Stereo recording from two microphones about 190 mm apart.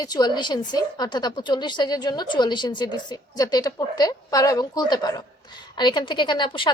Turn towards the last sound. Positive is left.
turn(degrees=25)  # may be behind; listen again after turning